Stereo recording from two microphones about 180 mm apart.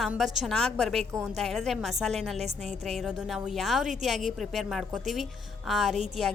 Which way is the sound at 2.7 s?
Centre (ahead or behind).